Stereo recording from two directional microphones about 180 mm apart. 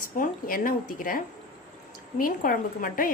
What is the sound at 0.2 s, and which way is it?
A woman's voice, 50° left (ahead or behind).